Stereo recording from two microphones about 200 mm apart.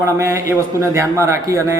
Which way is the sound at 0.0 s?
15° right (ahead or behind).